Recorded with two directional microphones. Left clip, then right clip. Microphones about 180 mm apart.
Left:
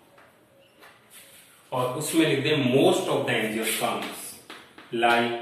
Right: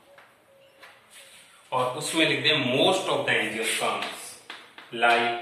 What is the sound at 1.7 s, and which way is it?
A man's voice, 15° right (ahead or behind).